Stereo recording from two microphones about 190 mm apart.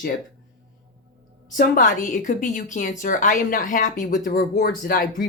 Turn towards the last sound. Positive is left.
turn(degrees=50)  # may be behind; listen again after turning